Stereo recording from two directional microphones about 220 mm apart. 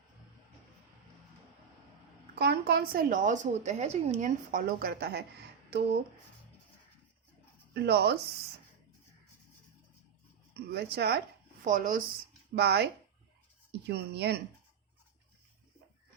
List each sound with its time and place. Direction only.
2.3 s a woman's voice: 45° right (ahead or behind)
7.7 s speech: 50° right (ahead or behind)
10.7 s speech: 45° right (ahead or behind)
11.6 s a woman's voice: 35° right (ahead or behind)
12.5 s speech: 50° right (ahead or behind)